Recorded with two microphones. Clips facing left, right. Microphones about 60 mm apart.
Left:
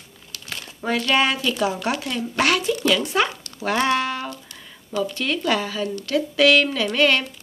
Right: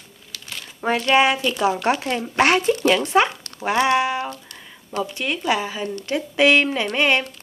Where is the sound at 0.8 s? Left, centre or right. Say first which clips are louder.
Right 3 dB; right.